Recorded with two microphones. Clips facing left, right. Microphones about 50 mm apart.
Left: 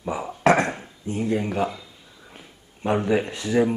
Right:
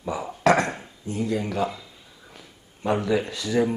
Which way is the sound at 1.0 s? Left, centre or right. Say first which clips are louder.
Left 2 dB; left.